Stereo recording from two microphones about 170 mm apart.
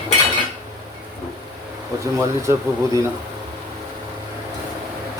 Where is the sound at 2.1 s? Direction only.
15° right (ahead or behind).